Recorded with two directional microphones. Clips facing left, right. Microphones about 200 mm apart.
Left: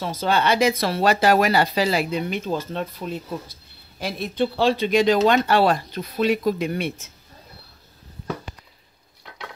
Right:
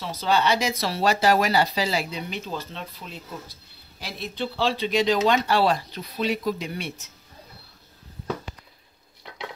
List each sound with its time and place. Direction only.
0.0 s speech: 50° left (ahead or behind)